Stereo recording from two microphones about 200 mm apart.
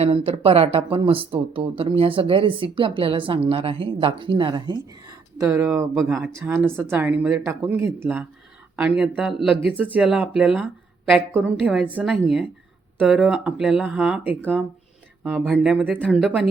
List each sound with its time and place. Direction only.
0.0 s speech: 30° right (ahead or behind); by 16.5 s centre (ahead or behind)